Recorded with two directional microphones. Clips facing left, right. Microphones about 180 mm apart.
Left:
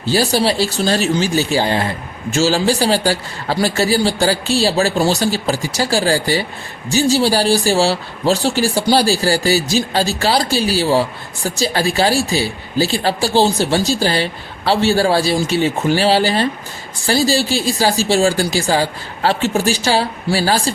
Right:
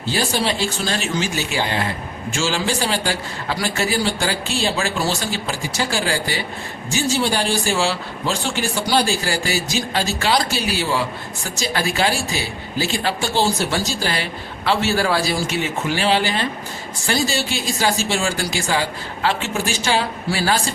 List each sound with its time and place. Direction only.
0.1 s speech: 35° left (ahead or behind)